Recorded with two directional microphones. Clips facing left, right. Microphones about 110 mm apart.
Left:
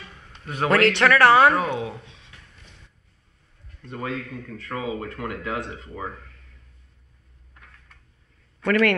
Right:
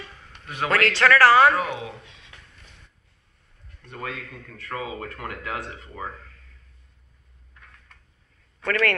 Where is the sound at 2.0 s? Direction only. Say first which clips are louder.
Left 1 dB; 90° right.